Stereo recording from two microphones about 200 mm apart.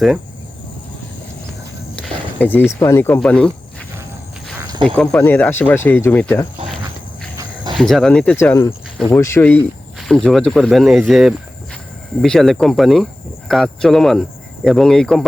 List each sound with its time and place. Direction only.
2.0 s speech: 10° left (ahead or behind)
4.6 s snake: 25° right (ahead or behind)
4.9 s speech: 5° left (ahead or behind)
7.3 s cricket: 20° right (ahead or behind)
7.8 s speech: centre (ahead or behind)